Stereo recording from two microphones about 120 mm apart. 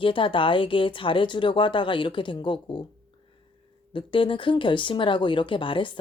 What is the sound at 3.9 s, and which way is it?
A woman's voice, 45° left (ahead or behind).